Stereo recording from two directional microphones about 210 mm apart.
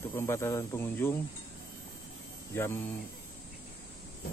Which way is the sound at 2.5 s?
10° left (ahead or behind).